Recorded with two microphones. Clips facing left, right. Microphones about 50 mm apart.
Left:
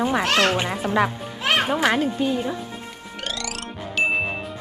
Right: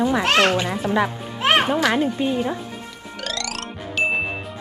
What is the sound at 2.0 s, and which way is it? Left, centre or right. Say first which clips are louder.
Speech: right 1 dB; right.